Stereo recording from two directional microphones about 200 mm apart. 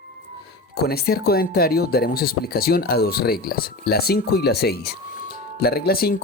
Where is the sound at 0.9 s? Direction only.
50° left (ahead or behind).